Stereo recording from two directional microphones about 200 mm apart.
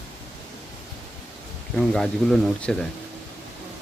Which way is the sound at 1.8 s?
5° left (ahead or behind).